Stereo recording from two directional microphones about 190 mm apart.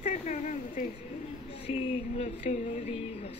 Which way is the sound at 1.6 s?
35° left (ahead or behind).